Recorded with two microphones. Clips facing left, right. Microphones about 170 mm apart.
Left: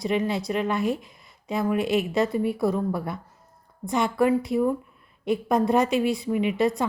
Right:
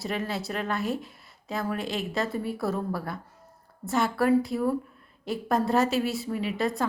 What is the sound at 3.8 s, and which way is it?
A woman's voice, 5° right (ahead or behind).